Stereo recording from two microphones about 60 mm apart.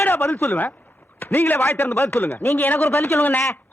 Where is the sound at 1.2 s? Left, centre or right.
Left.